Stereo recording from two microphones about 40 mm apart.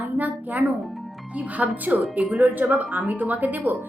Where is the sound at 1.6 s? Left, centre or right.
Right.